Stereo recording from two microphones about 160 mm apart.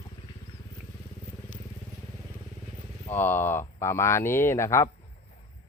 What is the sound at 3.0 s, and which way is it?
Speech, 10° left (ahead or behind).